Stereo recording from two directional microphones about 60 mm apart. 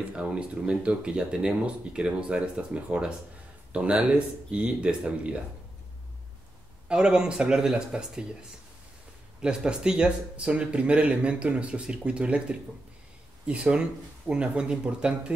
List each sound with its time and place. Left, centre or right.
0.1 s speech: centre
6.9 s speech: centre